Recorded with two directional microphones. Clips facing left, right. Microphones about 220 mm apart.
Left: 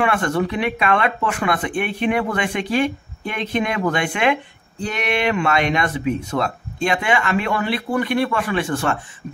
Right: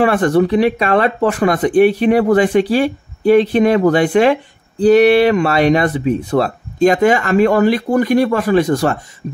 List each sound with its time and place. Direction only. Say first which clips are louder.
0.0 s speech: right 7 dB; 35° right (ahead or behind)